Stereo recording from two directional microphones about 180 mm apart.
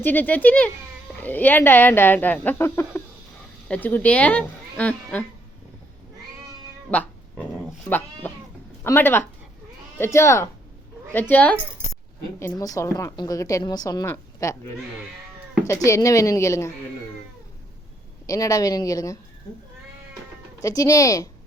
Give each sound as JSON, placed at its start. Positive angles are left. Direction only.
{"t": 0.0, "sound": "speech", "side_deg": 10}
{"t": 6.9, "sound": "cat", "side_deg": 10}
{"t": 7.9, "sound": "a woman's voice", "side_deg": 10}
{"t": 15.6, "sound": "speech", "side_deg": 15}
{"t": 18.3, "sound": "a woman's voice", "side_deg": 20}
{"t": 20.6, "sound": "a woman's voice", "side_deg": 20}